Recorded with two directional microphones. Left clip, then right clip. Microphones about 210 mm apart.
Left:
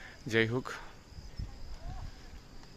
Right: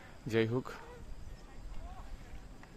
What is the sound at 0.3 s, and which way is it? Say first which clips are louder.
Speech: left 3 dB; centre (ahead or behind).